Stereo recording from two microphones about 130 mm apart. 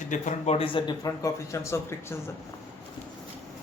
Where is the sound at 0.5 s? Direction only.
40° left (ahead or behind).